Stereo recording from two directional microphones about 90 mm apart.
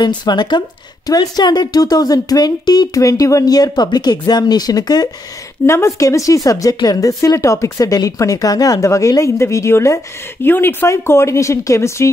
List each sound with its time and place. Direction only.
0.0 s a woman's voice: 55° left (ahead or behind)
5.7 s speech: 30° left (ahead or behind)